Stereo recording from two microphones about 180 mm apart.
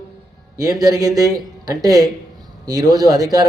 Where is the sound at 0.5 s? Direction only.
20° right (ahead or behind).